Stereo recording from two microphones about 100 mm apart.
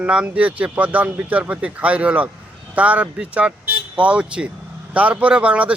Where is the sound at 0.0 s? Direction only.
10° right (ahead or behind).